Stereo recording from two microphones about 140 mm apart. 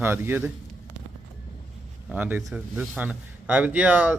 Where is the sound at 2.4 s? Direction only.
Centre (ahead or behind).